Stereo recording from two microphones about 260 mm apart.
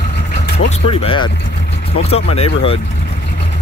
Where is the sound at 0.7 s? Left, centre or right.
Left.